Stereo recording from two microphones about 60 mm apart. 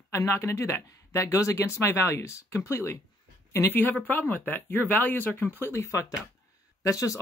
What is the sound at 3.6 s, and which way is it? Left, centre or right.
Speech, left.